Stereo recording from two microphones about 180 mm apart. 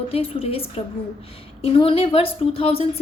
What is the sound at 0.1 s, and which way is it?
Speech, 30° left (ahead or behind).